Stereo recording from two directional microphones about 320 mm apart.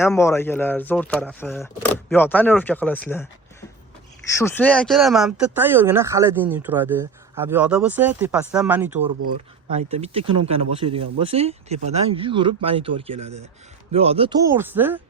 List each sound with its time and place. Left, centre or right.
0.0 s speech: centre
9.7 s speech: centre